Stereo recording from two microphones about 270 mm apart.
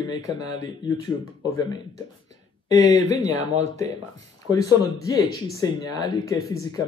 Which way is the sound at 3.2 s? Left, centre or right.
Right.